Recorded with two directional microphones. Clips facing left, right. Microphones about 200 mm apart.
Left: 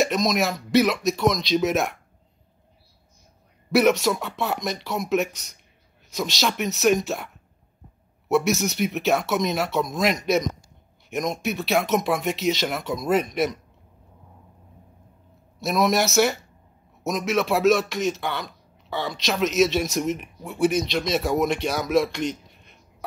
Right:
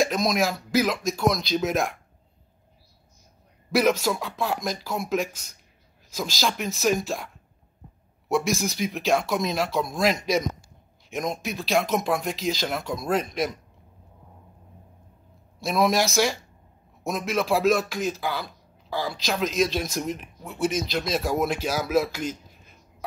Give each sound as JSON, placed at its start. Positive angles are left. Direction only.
{"t": 0.0, "sound": "a man's voice", "side_deg": 0}
{"t": 3.7, "sound": "a man's voice", "side_deg": 0}
{"t": 8.3, "sound": "a man's voice", "side_deg": 5}
{"t": 15.6, "sound": "a man's voice", "side_deg": 0}